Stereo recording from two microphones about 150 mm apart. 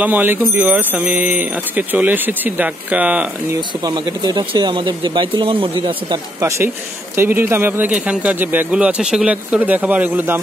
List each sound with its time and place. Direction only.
0.0 s speech: 10° right (ahead or behind)
3.8 s speech: 25° right (ahead or behind)
7.2 s speech: 15° right (ahead or behind)